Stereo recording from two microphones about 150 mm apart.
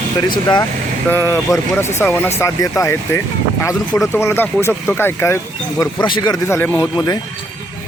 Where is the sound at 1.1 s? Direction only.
20° left (ahead or behind).